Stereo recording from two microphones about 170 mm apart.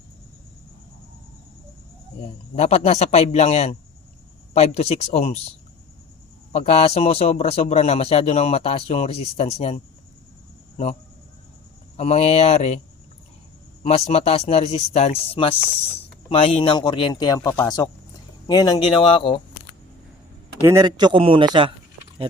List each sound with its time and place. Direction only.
2.6 s a man's voice: 40° left (ahead or behind)
6.5 s a man's voice: 40° left (ahead or behind)
11.9 s a man's voice: 40° left (ahead or behind)
13.8 s a man's voice: 35° left (ahead or behind)
20.7 s a man's voice: 20° right (ahead or behind)